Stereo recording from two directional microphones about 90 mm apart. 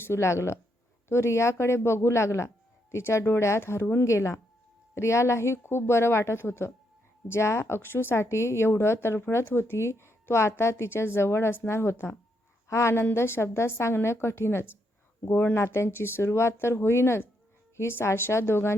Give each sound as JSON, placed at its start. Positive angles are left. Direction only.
{"t": 0.0, "sound": "a woman's voice", "side_deg": 30}